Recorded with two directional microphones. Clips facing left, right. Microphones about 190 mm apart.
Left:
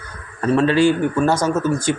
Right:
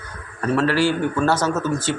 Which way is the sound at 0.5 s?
20° left (ahead or behind).